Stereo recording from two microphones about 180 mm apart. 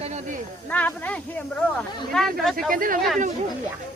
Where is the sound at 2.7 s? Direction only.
50° right (ahead or behind).